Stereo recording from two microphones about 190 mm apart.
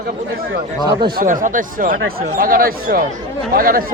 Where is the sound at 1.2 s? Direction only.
45° right (ahead or behind).